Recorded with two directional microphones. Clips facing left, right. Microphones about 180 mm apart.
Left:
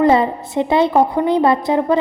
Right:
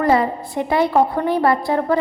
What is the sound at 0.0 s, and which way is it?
A woman's voice, 25° left (ahead or behind).